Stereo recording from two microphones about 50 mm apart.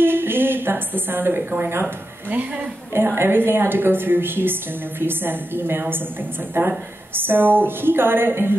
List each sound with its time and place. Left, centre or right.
0.0 s a woman's voice: right
3.2 s a woman's voice: right
6.5 s a woman's voice: right
7.2 s a woman's voice: right